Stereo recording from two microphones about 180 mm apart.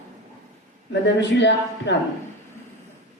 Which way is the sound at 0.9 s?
75° left (ahead or behind).